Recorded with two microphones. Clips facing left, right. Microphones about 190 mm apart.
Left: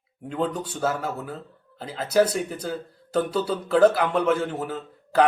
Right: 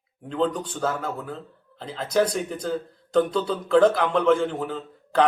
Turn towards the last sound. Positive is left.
turn(degrees=5)  # may be behind; listen again after turning